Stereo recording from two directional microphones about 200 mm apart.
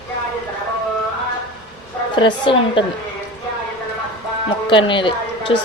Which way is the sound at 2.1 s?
25° left (ahead or behind).